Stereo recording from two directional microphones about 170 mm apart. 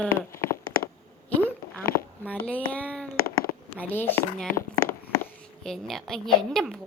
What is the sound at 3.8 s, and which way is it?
Speech, 10° left (ahead or behind).